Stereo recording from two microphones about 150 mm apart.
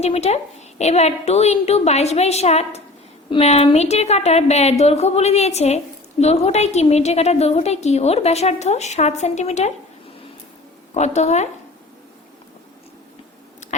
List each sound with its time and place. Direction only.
0.0 s a woman's voice: 45° left (ahead or behind)
10.9 s a woman's voice: 50° left (ahead or behind)